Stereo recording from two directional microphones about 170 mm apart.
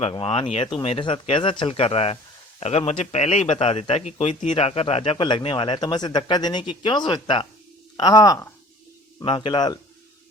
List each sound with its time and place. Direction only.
0.0 s a man's voice: 35° left (ahead or behind)
9.2 s speech: 30° left (ahead or behind)